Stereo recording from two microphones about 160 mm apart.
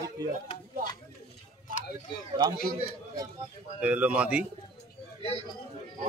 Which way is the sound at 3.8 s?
10° right (ahead or behind).